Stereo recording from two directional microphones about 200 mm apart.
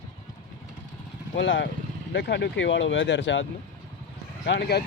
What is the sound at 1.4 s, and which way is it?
Speech, 65° left (ahead or behind).